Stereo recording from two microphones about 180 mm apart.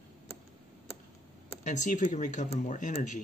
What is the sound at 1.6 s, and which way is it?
Speech, 45° left (ahead or behind).